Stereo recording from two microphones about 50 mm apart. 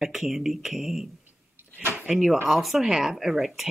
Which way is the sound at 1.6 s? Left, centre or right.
Right.